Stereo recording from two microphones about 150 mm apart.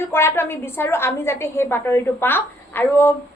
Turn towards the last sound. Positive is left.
turn(degrees=15)  # may be behind; listen again after turning